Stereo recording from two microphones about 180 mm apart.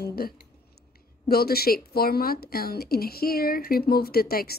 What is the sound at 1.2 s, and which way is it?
Speech, 60° left (ahead or behind).